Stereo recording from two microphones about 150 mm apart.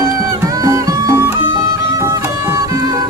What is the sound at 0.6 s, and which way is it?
Music, 20° right (ahead or behind).